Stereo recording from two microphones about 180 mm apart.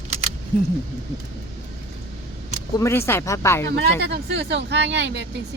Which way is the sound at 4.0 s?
65° right (ahead or behind).